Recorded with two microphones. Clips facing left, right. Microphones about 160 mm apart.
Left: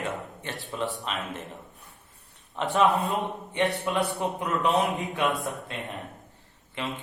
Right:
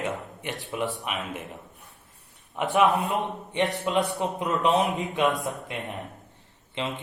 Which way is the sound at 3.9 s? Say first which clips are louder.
Right 2 dB; 20° right (ahead or behind).